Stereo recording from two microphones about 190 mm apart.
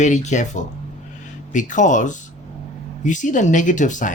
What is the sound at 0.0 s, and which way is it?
Speech, 40° left (ahead or behind).